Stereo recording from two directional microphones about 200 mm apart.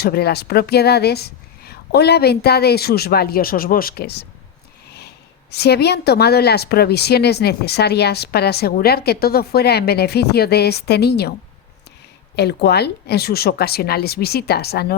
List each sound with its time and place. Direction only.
0.0 s a woman's voice: 50° left (ahead or behind)
12.4 s a woman's voice: 55° left (ahead or behind)